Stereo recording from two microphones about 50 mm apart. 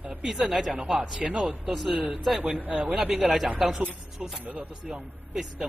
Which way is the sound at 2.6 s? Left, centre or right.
Right.